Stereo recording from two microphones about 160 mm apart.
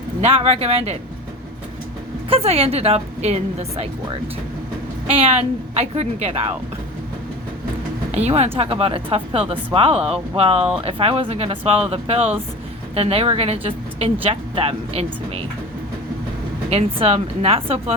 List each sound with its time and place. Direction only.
0.2 s speech: 40° right (ahead or behind)
2.3 s speech: 40° right (ahead or behind)
5.1 s speech: 40° right (ahead or behind)
8.1 s speech: 40° right (ahead or behind)
16.6 s speech: 40° right (ahead or behind)